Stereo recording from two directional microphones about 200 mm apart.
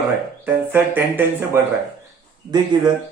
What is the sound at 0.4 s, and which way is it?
Speech, 10° right (ahead or behind).